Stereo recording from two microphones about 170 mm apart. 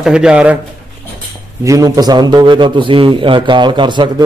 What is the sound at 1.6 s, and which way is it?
A man's voice, 20° right (ahead or behind).